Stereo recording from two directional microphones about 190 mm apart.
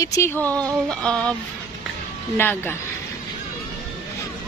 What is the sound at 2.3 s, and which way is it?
Speech, 10° left (ahead or behind).